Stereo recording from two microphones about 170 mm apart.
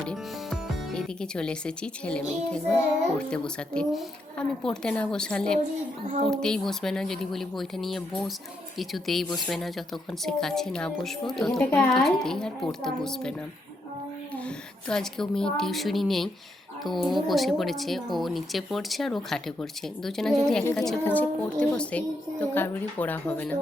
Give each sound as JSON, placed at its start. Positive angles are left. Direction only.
{"t": 0.1, "sound": "music", "side_deg": 5}
{"t": 3.2, "sound": "a woman's voice", "side_deg": 5}
{"t": 14.3, "sound": "a woman's voice", "side_deg": 5}